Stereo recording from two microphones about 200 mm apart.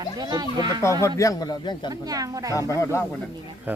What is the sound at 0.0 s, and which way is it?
Speech, 20° right (ahead or behind).